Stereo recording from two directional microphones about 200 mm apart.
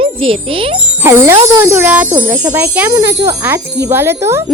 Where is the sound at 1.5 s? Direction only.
10° right (ahead or behind).